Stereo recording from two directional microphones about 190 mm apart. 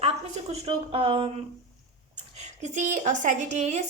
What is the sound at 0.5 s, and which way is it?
Speech, 30° right (ahead or behind).